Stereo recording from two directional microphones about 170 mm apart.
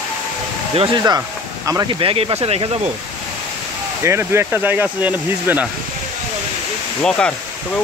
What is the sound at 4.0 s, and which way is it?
Speech, 15° right (ahead or behind).